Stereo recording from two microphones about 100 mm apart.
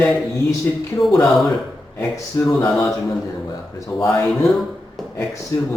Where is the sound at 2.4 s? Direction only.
40° left (ahead or behind).